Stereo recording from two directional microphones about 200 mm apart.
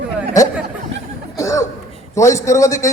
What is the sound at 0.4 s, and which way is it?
Speech, 15° left (ahead or behind).